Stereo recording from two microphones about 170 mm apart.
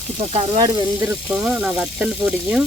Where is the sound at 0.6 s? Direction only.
10° right (ahead or behind).